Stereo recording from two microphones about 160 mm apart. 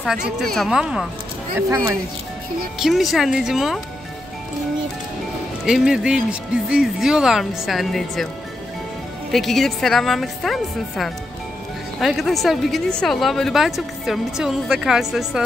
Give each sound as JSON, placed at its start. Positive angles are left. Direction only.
{"t": 0.0, "sound": "a woman's voice", "side_deg": 0}
{"t": 2.8, "sound": "a woman's voice", "side_deg": 0}
{"t": 5.7, "sound": "a woman's voice", "side_deg": -5}
{"t": 9.3, "sound": "a woman's voice", "side_deg": 0}